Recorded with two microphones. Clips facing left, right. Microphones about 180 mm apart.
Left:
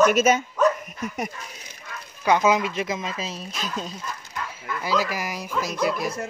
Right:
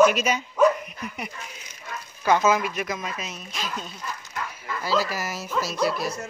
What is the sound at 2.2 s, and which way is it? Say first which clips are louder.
Speech: left 1 dB; 15° left (ahead or behind).